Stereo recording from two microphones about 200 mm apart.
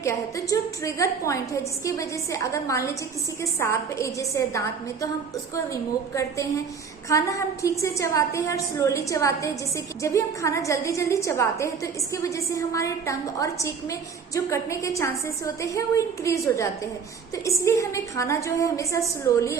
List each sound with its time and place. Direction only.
0.0 s a woman's voice: 15° left (ahead or behind)